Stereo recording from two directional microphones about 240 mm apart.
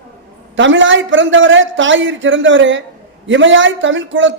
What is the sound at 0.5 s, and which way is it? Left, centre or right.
A man's voice, right.